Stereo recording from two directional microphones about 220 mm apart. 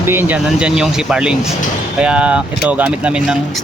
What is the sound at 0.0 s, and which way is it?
Speech, 10° right (ahead or behind).